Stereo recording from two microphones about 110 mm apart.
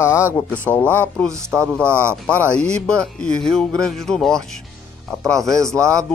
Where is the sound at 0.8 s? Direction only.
20° right (ahead or behind).